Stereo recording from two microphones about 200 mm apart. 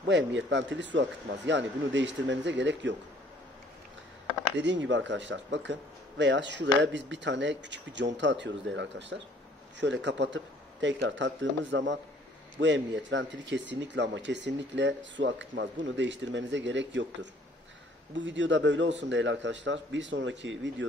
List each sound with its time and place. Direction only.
0.0 s speech: 65° right (ahead or behind)
4.6 s speech: 65° right (ahead or behind)